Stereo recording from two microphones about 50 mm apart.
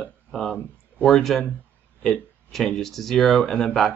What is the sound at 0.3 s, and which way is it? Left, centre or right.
Speech, centre.